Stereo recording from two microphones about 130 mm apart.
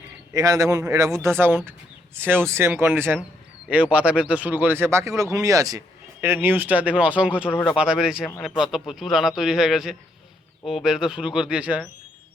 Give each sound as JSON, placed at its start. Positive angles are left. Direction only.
{"t": 0.3, "sound": "a man's voice", "side_deg": -25}
{"t": 6.2, "sound": "a man's voice", "side_deg": -15}